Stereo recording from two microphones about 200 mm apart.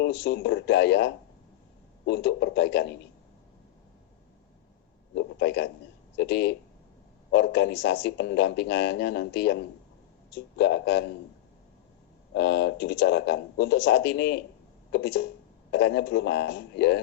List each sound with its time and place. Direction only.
0.0 s speech: 60° left (ahead or behind)
5.1 s a sound: 60° left (ahead or behind)
6.1 s speech: 55° left (ahead or behind)
12.3 s speech: 60° left (ahead or behind)